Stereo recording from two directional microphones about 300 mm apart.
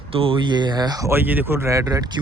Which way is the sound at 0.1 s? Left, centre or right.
Centre.